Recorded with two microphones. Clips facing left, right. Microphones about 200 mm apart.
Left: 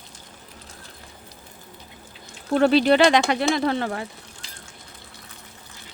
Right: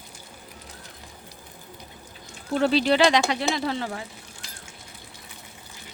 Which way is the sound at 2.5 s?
55° left (ahead or behind).